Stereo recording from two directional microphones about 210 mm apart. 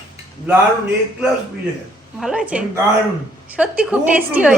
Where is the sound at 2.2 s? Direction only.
5° right (ahead or behind).